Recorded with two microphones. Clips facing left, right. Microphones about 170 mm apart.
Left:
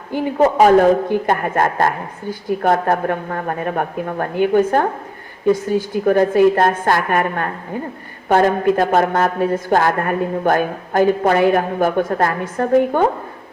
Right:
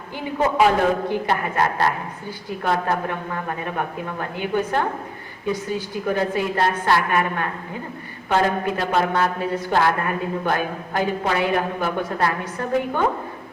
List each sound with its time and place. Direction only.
0.1 s a man's voice: 45° left (ahead or behind)